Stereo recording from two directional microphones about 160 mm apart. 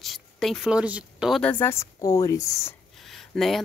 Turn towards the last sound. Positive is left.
turn(degrees=0)  # may be behind; listen again after turning